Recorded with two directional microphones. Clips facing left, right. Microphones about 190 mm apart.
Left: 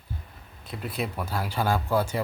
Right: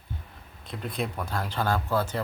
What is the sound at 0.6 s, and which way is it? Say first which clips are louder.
Speech: even; 5° left (ahead or behind).